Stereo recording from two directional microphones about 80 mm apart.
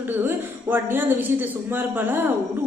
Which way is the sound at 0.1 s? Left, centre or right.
Right.